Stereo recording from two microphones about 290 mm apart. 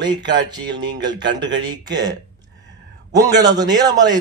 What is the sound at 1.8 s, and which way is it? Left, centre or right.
Speech, centre.